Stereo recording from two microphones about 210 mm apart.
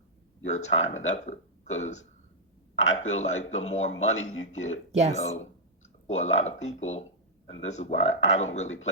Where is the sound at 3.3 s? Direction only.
70° left (ahead or behind).